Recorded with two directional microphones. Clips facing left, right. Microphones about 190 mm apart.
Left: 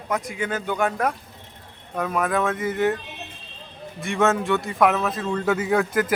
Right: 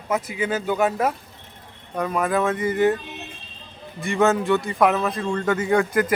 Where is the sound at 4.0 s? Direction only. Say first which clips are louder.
Right 2 dB; centre (ahead or behind).